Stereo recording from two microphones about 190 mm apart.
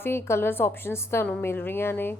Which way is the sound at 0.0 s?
15° left (ahead or behind).